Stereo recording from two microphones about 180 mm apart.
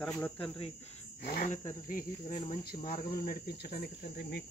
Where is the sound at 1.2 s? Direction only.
50° left (ahead or behind).